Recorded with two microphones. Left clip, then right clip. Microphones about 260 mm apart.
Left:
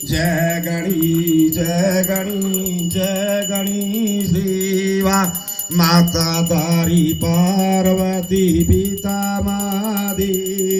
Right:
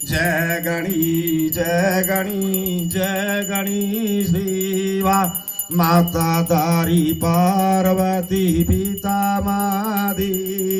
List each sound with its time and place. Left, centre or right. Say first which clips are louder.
4.7 s mantra: even; right
5.7 s music: left 1 dB; right